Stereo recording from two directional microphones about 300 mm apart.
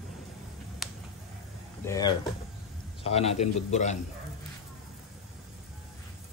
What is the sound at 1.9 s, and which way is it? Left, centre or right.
A man's voice, centre.